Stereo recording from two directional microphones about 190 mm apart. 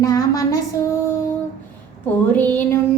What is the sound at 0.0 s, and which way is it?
Child singing, 20° left (ahead or behind).